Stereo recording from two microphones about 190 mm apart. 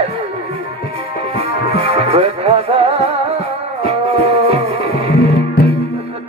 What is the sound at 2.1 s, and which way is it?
Music, 30° right (ahead or behind).